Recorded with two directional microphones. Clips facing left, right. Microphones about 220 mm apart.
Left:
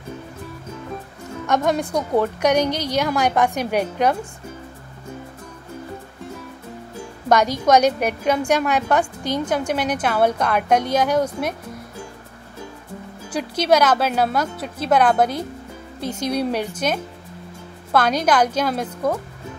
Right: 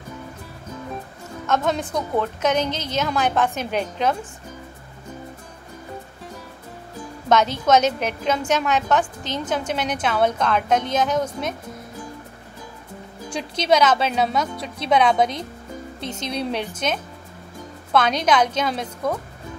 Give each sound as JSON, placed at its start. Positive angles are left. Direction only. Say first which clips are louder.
{"t": 1.5, "sound": "a woman's voice", "louder": "left 2 dB", "side_deg": 10}
{"t": 7.2, "sound": "a woman's voice", "louder": "left 1 dB", "side_deg": 10}
{"t": 13.3, "sound": "a woman's voice", "louder": "left 2 dB", "side_deg": 10}
{"t": 17.9, "sound": "a woman's voice", "louder": "left 1 dB", "side_deg": 10}